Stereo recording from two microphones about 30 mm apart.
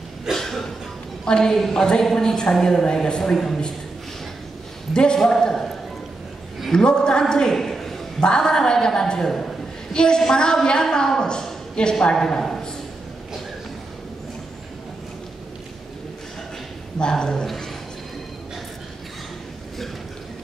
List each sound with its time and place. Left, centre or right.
0.3 s a sound: centre
1.2 s a woman's voice: left
3.3 s a man's voice: centre
4.9 s a woman's voice: left
5.2 s a man's voice: centre
6.7 s a woman's voice: left
7.4 s a sound: centre
8.4 s a woman's voice: left
17.0 s a woman's voice: left